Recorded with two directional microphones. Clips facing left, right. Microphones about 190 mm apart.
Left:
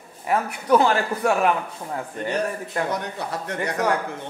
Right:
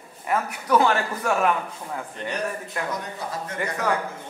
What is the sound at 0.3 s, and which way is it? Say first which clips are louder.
A man's voice: left 3 dB; 30° left (ahead or behind).